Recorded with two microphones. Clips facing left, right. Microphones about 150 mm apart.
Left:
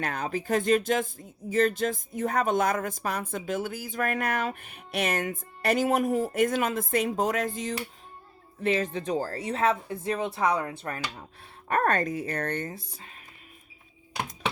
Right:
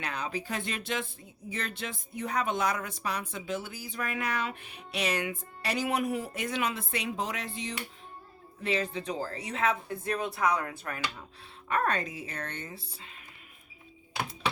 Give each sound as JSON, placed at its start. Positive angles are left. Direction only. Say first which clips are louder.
{"t": 0.0, "sound": "speech", "louder": "left 4 dB", "side_deg": 45}